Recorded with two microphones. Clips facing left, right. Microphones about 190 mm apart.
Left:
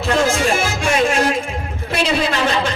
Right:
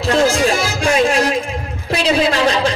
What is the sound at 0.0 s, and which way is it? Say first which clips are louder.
Music: right 3 dB; 35° right (ahead or behind).